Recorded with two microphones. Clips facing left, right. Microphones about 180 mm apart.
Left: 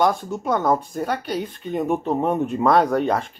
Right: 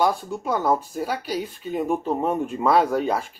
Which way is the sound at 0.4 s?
5° right (ahead or behind).